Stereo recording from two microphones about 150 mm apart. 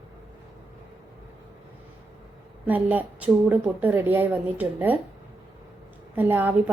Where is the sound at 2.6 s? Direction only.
10° right (ahead or behind).